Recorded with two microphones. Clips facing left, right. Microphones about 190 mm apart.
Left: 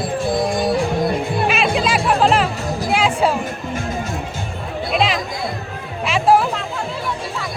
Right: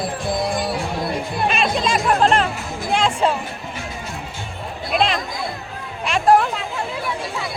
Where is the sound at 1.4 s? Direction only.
5° left (ahead or behind).